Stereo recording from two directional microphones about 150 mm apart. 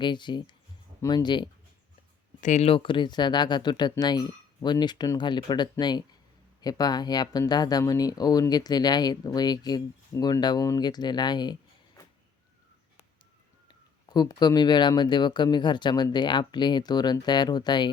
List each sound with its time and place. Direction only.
0.0 s speech: 30° left (ahead or behind)
2.4 s speech: 50° left (ahead or behind); by 11.5 s 30° left (ahead or behind)
13.7 s speech: 25° left (ahead or behind)